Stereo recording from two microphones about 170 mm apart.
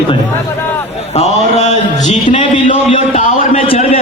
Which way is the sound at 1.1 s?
40° left (ahead or behind).